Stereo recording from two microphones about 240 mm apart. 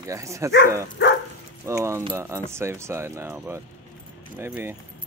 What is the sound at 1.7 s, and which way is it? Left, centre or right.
Speech, centre.